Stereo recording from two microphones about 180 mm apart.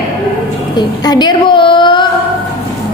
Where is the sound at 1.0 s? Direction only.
20° left (ahead or behind).